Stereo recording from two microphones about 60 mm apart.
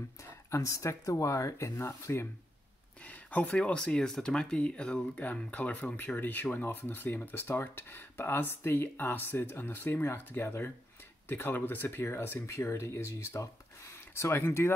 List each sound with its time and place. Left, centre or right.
0.2 s speech: left
3.0 s speech: left
12.4 s speech: left
13.8 s speech: left